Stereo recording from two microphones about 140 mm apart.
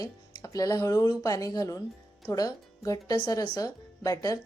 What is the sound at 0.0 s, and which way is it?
Speech, 25° left (ahead or behind).